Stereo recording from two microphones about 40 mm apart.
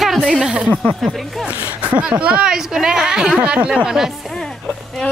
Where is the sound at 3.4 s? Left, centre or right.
Right.